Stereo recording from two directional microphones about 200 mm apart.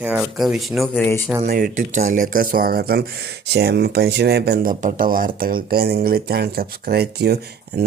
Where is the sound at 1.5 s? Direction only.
45° right (ahead or behind).